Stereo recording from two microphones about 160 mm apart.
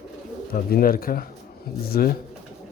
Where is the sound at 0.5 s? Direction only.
65° left (ahead or behind).